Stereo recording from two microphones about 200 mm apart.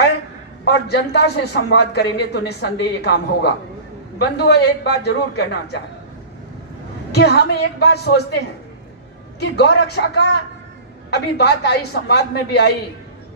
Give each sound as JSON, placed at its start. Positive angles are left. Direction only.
{"t": 0.7, "sound": "a man's voice", "side_deg": 55}
{"t": 7.1, "sound": "a woman's voice", "side_deg": 55}
{"t": 9.4, "sound": "a woman's voice", "side_deg": 50}